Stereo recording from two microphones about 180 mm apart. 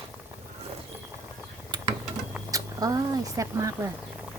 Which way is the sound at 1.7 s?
25° right (ahead or behind).